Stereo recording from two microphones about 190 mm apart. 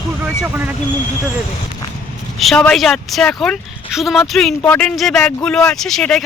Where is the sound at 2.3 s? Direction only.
Centre (ahead or behind).